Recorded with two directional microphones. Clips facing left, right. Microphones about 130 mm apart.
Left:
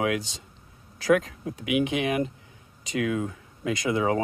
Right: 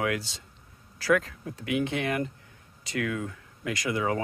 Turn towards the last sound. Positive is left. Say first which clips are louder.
# left 4 dB
turn(degrees=20)  # may be behind; listen again after turning